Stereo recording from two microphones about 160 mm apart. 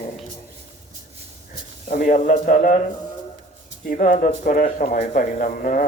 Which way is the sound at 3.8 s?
60° left (ahead or behind).